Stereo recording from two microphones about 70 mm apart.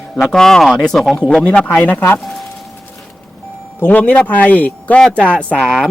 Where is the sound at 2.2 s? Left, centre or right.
Centre.